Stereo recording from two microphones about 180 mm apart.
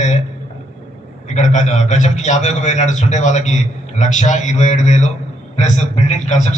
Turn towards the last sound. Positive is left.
turn(degrees=40)  # may be behind; listen again after turning